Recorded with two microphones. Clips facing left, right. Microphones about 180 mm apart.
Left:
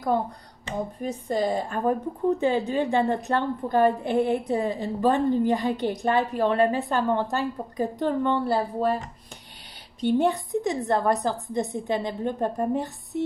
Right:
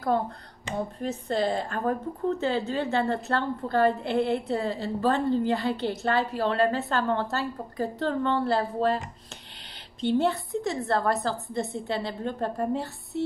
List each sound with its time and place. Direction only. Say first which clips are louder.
0.7 s speech: left 1 dB; 10° left (ahead or behind)